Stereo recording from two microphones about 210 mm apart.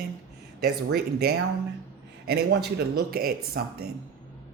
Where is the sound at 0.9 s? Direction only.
50° right (ahead or behind).